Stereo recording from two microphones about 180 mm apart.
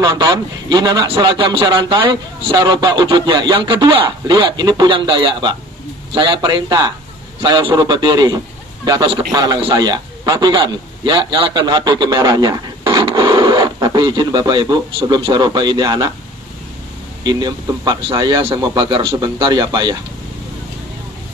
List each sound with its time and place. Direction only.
0.0 s a man's voice: 25° right (ahead or behind)
17.2 s a man's voice: 20° right (ahead or behind)